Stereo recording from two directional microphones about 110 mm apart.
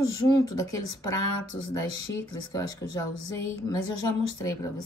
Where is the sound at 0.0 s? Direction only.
35° left (ahead or behind).